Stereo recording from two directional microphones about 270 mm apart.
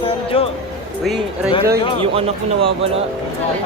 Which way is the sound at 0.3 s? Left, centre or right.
Left.